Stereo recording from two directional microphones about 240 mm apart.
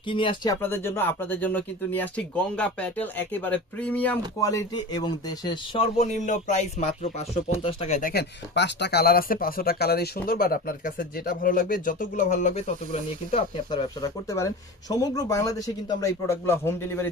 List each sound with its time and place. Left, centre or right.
0.1 s speech: left
8.1 s speech: left; by 17.1 s centre